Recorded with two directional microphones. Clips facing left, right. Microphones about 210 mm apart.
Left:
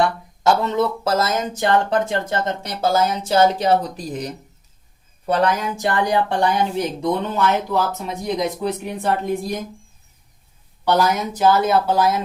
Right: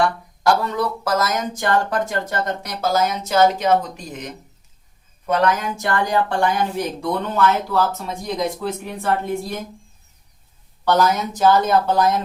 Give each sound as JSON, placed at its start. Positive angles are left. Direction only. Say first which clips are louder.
{"t": 0.0, "sound": "speech", "louder": "even", "side_deg": 25}
{"t": 5.5, "sound": "speech", "louder": "left 1 dB", "side_deg": 20}
{"t": 10.8, "sound": "speech", "louder": "even", "side_deg": 10}